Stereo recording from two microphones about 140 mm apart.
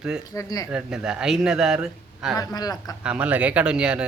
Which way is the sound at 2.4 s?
25° left (ahead or behind).